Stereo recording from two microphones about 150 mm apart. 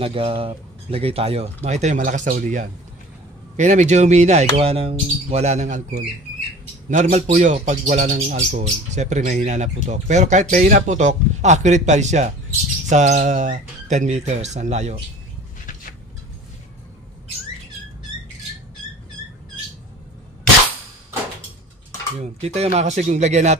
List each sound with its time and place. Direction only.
0.0 s a man's voice: 35° right (ahead or behind)
22.2 s a man's voice: 45° right (ahead or behind)